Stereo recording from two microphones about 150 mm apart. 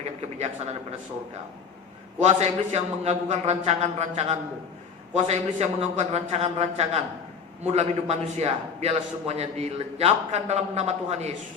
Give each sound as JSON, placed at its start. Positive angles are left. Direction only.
{"t": 0.2, "sound": "speech", "side_deg": -45}
{"t": 2.2, "sound": "a man's voice", "side_deg": -45}